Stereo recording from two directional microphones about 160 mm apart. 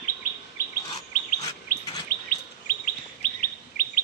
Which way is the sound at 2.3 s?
55° left (ahead or behind).